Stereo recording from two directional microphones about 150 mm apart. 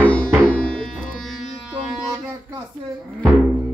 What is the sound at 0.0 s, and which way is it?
Music, 10° left (ahead or behind).